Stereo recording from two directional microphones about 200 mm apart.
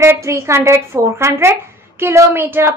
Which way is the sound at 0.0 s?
15° right (ahead or behind).